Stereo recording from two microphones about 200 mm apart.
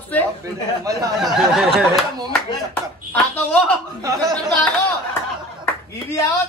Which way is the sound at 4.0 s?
20° right (ahead or behind).